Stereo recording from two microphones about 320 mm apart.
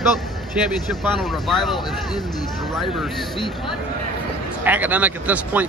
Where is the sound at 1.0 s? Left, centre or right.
Centre.